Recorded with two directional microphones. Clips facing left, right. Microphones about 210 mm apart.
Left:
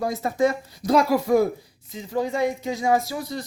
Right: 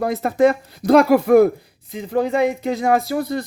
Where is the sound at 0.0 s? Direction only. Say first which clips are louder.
Right 6 dB; 60° right (ahead or behind).